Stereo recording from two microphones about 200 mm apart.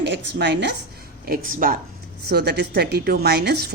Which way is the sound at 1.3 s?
45° right (ahead or behind).